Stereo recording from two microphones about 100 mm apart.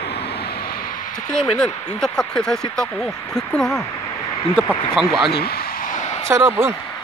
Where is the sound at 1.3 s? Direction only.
5° left (ahead or behind).